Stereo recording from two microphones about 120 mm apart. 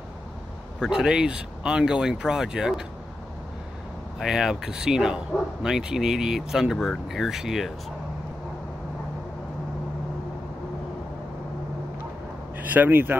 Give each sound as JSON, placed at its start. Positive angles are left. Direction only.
{"t": 0.7, "sound": "speech", "side_deg": -5}
{"t": 4.2, "sound": "speech", "side_deg": -5}
{"t": 12.5, "sound": "speech", "side_deg": -15}